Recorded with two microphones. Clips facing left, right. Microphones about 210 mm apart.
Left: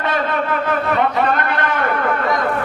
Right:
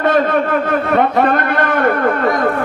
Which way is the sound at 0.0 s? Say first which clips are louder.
Right 7 dB; 50° right (ahead or behind).